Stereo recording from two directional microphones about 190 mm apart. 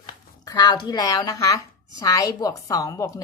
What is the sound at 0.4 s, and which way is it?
Speech, 20° left (ahead or behind).